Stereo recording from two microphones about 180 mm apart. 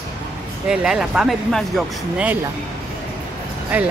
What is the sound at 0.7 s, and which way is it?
A woman's voice, 5° right (ahead or behind).